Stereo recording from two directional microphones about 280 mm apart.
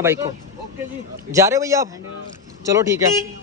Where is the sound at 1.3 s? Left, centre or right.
Centre.